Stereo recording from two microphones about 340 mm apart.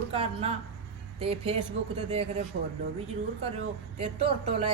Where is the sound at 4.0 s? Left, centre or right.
Centre.